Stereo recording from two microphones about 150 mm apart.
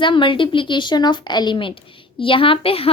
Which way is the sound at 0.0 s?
35° left (ahead or behind).